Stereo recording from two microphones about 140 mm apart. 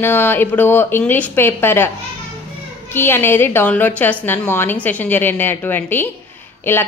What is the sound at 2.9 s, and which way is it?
A woman's voice, 15° left (ahead or behind).